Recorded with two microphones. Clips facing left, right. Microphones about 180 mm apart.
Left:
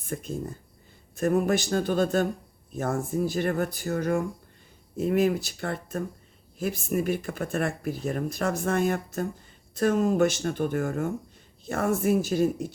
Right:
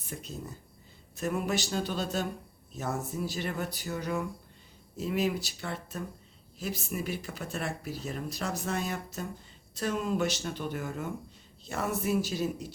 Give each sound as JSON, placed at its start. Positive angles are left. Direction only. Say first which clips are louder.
{"t": 0.0, "sound": "speech", "louder": "left 8 dB", "side_deg": 50}